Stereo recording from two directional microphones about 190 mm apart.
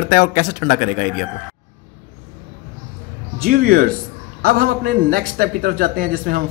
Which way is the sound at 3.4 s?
50° right (ahead or behind).